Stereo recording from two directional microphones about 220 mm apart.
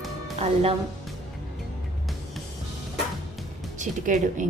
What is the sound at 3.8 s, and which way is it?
Speech, 35° right (ahead or behind).